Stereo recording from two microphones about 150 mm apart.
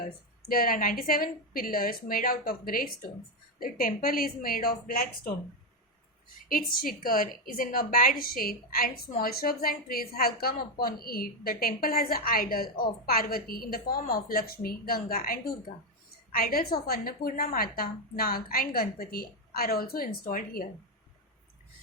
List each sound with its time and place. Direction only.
0.0 s a woman's voice: 75° left (ahead or behind)
6.8 s a woman's voice: 70° left (ahead or behind)